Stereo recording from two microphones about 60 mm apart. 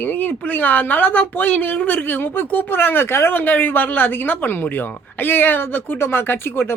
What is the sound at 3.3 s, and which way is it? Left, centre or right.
Speech, left.